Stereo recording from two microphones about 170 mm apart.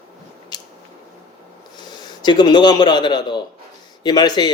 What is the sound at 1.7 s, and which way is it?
A man's voice, 25° left (ahead or behind).